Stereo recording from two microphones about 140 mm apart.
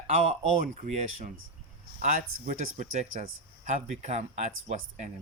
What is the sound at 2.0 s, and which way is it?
Speech, 70° right (ahead or behind).